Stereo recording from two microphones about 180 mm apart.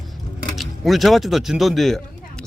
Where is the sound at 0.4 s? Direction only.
Centre (ahead or behind).